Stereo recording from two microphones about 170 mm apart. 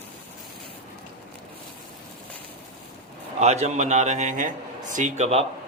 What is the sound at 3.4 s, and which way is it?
A man's voice, 40° right (ahead or behind).